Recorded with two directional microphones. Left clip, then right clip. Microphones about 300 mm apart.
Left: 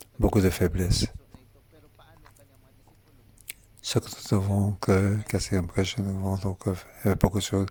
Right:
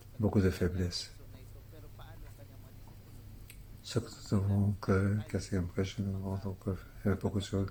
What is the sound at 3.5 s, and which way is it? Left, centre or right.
Speech, left.